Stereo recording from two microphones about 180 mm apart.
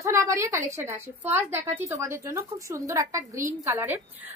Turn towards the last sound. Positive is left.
turn(degrees=-15)  # may be behind; listen again after turning